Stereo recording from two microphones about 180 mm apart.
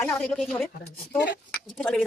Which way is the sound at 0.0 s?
5° left (ahead or behind).